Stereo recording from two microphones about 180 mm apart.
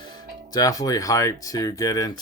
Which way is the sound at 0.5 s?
20° left (ahead or behind).